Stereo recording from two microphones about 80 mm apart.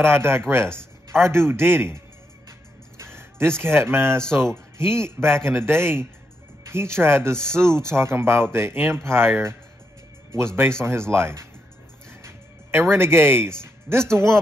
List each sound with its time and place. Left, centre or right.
0.0 s speech: right
0.7 s a sound: right
1.3 s a man's voice: right
3.0 s speech: right
10.3 s speech: right
12.1 s music: right
12.9 s a man's voice: right
13.6 s music: right
14.1 s speech: right